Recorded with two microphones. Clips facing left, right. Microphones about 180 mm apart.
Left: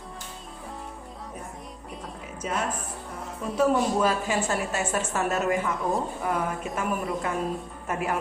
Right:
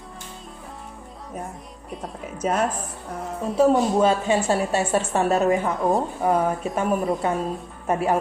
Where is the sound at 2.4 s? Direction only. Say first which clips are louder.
Right 7 dB; 40° right (ahead or behind).